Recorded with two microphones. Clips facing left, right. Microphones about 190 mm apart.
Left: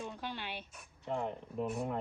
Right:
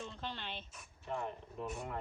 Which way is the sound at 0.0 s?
10° left (ahead or behind).